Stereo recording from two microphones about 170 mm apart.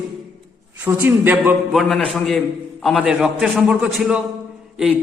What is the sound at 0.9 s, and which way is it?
Speech, 15° right (ahead or behind).